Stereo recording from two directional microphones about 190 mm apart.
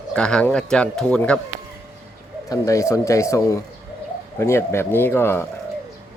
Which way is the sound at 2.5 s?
15° left (ahead or behind).